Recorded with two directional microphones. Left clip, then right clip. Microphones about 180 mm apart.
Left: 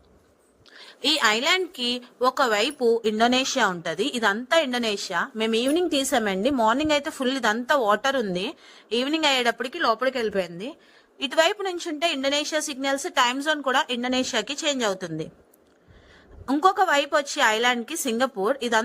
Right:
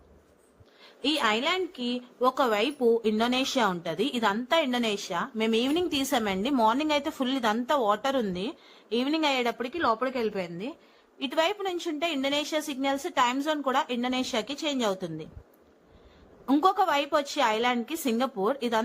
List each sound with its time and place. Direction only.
0.9 s a woman's voice: 40° left (ahead or behind)
2.2 s a woman's voice: 30° left (ahead or behind)
16.5 s a woman's voice: 20° left (ahead or behind)